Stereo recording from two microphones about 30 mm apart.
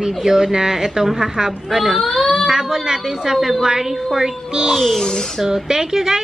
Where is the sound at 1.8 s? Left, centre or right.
Centre.